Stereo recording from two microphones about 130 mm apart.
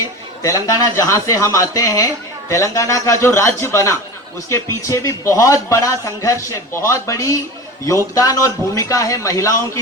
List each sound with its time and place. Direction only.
0.4 s a man's voice: 25° left (ahead or behind)